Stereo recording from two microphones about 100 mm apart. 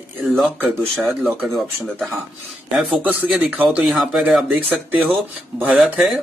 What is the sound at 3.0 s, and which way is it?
Speech, 15° right (ahead or behind).